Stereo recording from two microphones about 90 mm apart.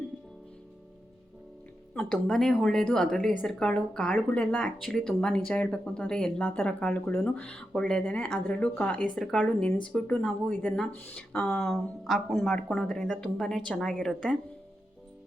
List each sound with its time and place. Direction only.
2.2 s speech: 5° left (ahead or behind)
11.3 s speech: 5° left (ahead or behind)